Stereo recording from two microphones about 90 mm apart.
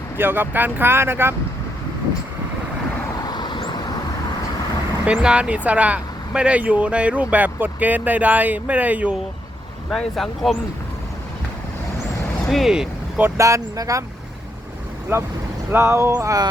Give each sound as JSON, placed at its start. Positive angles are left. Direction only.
{"t": 0.2, "sound": "speech", "side_deg": -25}
{"t": 3.2, "sound": "vehicle", "side_deg": 50}
{"t": 5.0, "sound": "speech", "side_deg": -10}
{"t": 9.9, "sound": "speech", "side_deg": 5}
{"t": 12.5, "sound": "speech", "side_deg": 0}
{"t": 13.1, "sound": "speech", "side_deg": -25}
{"t": 13.4, "sound": "speech", "side_deg": -35}
{"t": 15.1, "sound": "speech", "side_deg": -30}
{"t": 16.1, "sound": "speech", "side_deg": -40}